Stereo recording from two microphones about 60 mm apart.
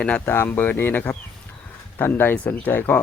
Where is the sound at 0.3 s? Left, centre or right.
Left.